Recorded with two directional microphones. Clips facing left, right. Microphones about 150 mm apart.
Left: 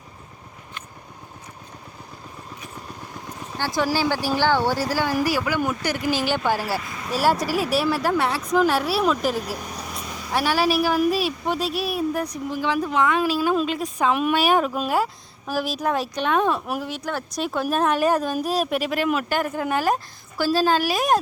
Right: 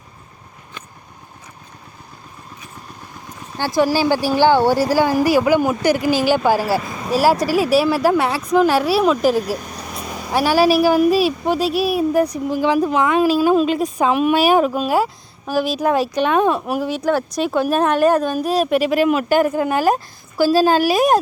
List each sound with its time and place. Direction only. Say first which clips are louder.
3.6 s speech: right 6 dB; 10° right (ahead or behind)
6.6 s speech: right 7 dB; 35° right (ahead or behind)
7.2 s speech: right 5 dB; 5° right (ahead or behind)